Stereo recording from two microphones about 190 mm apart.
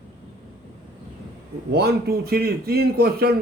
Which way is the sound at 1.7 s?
55° right (ahead or behind).